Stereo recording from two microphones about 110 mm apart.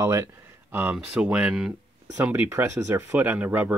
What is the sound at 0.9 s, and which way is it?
Speech, 10° right (ahead or behind).